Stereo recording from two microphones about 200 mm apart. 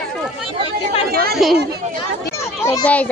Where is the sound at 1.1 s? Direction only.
50° right (ahead or behind).